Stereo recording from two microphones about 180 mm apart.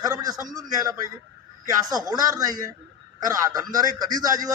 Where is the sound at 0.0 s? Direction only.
20° right (ahead or behind).